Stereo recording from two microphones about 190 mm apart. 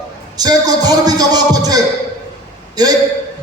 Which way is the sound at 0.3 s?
20° right (ahead or behind).